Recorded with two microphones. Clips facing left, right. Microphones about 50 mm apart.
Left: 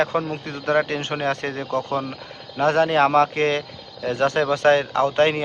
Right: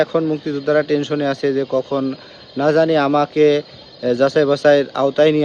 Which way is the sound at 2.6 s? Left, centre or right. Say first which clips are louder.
Right 3 dB; left.